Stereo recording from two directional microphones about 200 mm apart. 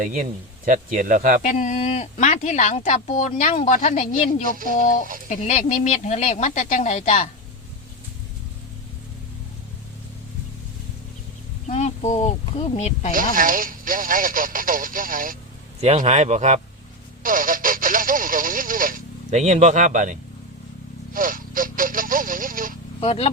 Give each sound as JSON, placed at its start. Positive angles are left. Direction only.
{"t": 0.0, "sound": "speech", "side_deg": -40}
{"t": 1.4, "sound": "speech", "side_deg": 40}
{"t": 11.6, "sound": "speech", "side_deg": 35}
{"t": 13.1, "sound": "speech", "side_deg": -45}
{"t": 15.8, "sound": "speech", "side_deg": -35}
{"t": 23.0, "sound": "speech", "side_deg": 30}